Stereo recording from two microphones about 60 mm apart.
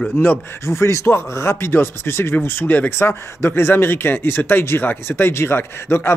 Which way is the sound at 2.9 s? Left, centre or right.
Left.